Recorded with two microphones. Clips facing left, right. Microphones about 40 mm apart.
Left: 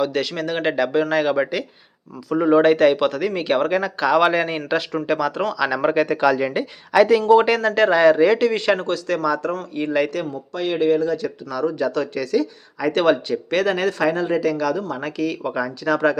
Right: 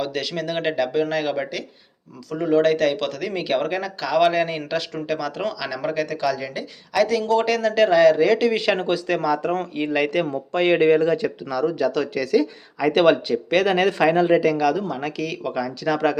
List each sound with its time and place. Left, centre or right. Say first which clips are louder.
0.0 s speech: left 4 dB; centre
5.8 s speech: left 5 dB; left
7.0 s speech: left 5 dB; left
7.7 s speech: right 1 dB; centre
10.2 s speech: right 5 dB; right
11.5 s speech: even; centre
14.1 s a man's voice: right 4 dB; right
14.4 s speech: right 1 dB; centre
15.0 s speech: left 2 dB; centre
15.9 s speech: left 2 dB; centre